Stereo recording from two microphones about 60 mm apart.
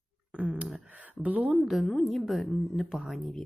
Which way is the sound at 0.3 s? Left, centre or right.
Centre.